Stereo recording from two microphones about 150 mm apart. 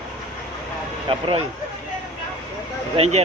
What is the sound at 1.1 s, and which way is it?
Speech, 35° right (ahead or behind).